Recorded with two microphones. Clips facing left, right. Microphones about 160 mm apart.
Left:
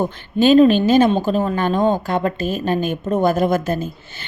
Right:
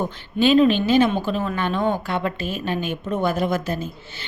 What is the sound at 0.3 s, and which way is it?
A woman's voice, 40° left (ahead or behind).